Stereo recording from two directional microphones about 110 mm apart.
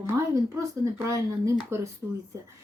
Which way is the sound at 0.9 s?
30° right (ahead or behind).